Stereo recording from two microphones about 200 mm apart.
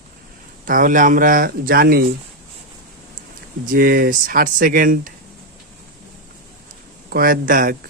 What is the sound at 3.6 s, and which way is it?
Speech, 45° right (ahead or behind).